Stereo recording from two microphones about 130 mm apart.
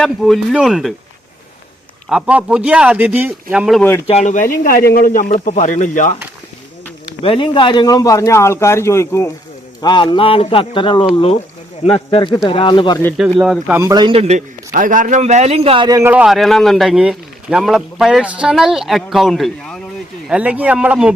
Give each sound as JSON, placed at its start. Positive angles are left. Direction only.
{"t": 0.0, "sound": "a man's voice", "side_deg": 0}
{"t": 2.0, "sound": "speech", "side_deg": -5}
{"t": 4.0, "sound": "speech", "side_deg": 60}
{"t": 7.2, "sound": "speech", "side_deg": 45}
{"t": 9.8, "sound": "a man's voice", "side_deg": 35}
{"t": 13.4, "sound": "a man's voice", "side_deg": -5}
{"t": 13.9, "sound": "a man's voice", "side_deg": -35}
{"t": 14.2, "sound": "a man's voice", "side_deg": -65}
{"t": 16.0, "sound": "a man's voice", "side_deg": -5}
{"t": 20.2, "sound": "speech", "side_deg": -10}